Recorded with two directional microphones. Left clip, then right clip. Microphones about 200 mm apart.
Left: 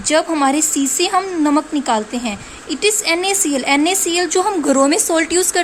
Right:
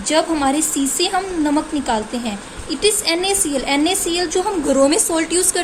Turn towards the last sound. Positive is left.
turn(degrees=50)  # may be behind; listen again after turning